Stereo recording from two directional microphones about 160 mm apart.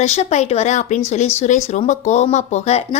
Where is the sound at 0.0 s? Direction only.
45° left (ahead or behind).